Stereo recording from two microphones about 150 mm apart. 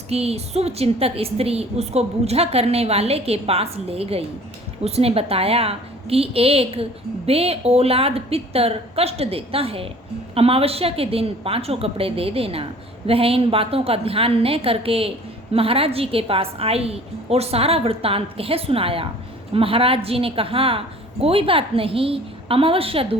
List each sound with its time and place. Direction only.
0.1 s a woman's voice: 45° right (ahead or behind)